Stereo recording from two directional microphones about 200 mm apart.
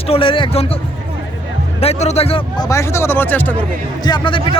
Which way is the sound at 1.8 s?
30° left (ahead or behind).